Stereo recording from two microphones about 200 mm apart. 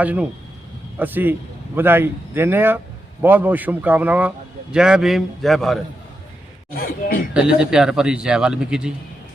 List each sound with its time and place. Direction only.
0.0 s a man's voice: 5° right (ahead or behind)
6.7 s a sound: 45° left (ahead or behind)
7.3 s speech: 5° right (ahead or behind)